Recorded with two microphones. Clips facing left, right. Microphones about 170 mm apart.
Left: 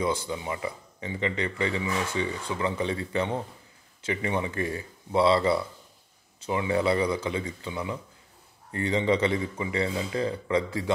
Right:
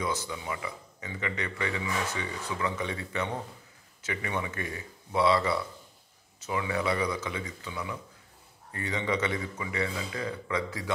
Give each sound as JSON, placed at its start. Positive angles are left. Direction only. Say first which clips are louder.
{"t": 0.0, "sound": "a man's voice", "louder": "left 5 dB", "side_deg": 30}